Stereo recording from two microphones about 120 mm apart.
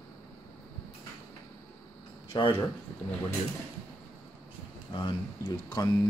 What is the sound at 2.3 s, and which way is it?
Speech, 45° left (ahead or behind).